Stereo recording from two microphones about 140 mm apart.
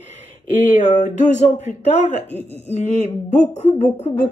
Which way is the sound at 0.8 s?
60° left (ahead or behind).